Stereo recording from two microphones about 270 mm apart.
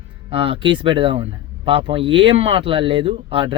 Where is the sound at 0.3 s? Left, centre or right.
Centre.